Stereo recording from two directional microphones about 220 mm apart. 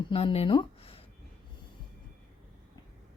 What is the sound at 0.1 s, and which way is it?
Speech, 25° left (ahead or behind).